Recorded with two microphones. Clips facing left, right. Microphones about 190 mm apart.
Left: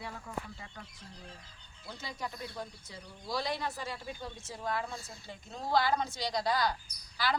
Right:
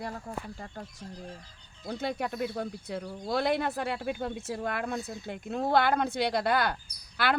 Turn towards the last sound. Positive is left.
turn(degrees=-60)  # may be behind; listen again after turning